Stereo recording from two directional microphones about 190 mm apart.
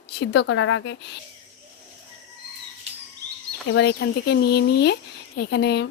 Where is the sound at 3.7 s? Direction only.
60° left (ahead or behind).